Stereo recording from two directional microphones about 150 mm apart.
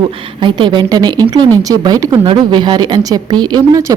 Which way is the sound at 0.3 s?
30° right (ahead or behind).